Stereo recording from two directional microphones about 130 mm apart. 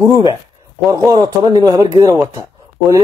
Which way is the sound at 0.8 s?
30° right (ahead or behind).